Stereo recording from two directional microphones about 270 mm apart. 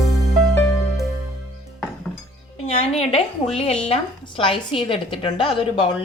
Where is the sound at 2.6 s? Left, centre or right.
Left.